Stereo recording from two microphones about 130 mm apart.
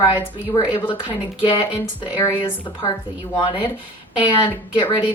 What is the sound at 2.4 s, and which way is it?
A woman's voice, 40° left (ahead or behind).